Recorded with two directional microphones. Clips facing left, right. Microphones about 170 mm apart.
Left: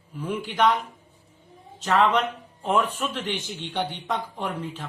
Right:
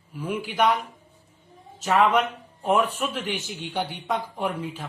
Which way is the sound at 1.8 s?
10° right (ahead or behind).